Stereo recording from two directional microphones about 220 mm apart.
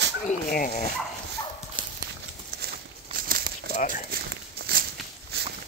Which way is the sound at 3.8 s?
35° left (ahead or behind).